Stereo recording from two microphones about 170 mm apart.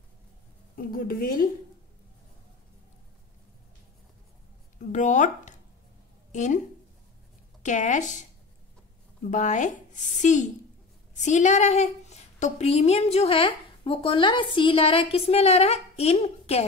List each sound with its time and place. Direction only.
0.7 s a woman's voice: 60° left (ahead or behind)
4.9 s a woman's voice: 45° left (ahead or behind)
7.6 s a woman's voice: 45° left (ahead or behind)
9.3 s a woman's voice: 45° left (ahead or behind)